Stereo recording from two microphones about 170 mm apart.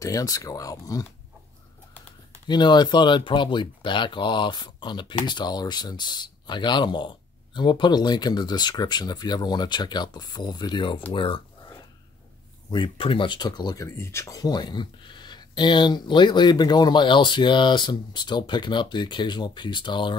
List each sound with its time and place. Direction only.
0.0 s speech: 20° left (ahead or behind)
2.4 s speech: 25° left (ahead or behind)
12.7 s speech: 30° left (ahead or behind)